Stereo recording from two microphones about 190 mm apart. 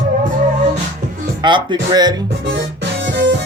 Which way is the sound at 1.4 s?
25° right (ahead or behind).